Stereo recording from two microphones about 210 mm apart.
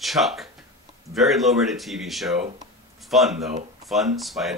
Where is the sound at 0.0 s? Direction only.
Centre (ahead or behind).